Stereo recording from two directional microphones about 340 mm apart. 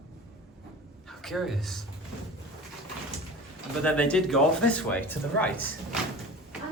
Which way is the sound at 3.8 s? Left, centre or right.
Centre.